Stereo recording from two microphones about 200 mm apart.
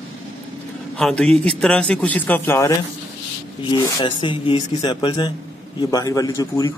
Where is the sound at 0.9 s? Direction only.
5° left (ahead or behind).